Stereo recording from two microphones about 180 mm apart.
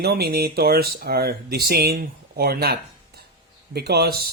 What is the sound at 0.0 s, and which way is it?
Speech, 60° right (ahead or behind).